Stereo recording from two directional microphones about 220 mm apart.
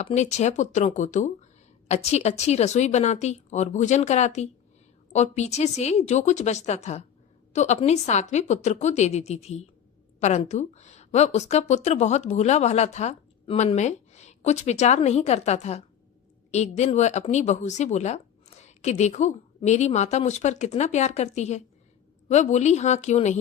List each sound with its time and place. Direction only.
0.0 s a woman's voice: 30° left (ahead or behind)